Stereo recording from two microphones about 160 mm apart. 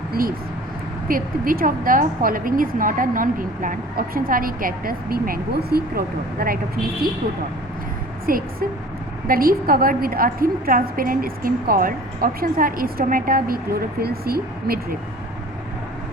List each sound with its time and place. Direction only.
0.1 s a woman's voice: 65° right (ahead or behind)
8.3 s a woman's voice: 65° right (ahead or behind)